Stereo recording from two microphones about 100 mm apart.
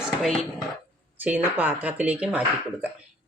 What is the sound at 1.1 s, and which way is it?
A woman's voice, 20° right (ahead or behind).